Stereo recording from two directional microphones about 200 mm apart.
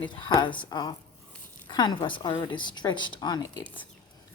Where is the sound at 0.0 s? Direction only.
25° left (ahead or behind).